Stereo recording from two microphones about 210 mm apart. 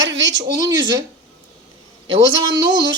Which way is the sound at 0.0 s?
60° right (ahead or behind).